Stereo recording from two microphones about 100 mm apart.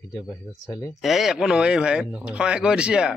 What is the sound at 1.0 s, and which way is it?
Speech, 5° right (ahead or behind).